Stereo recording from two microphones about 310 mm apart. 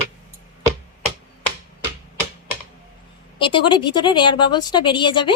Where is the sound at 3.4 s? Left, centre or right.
Centre.